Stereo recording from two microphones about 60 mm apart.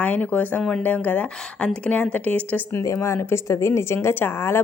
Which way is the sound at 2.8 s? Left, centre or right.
Left.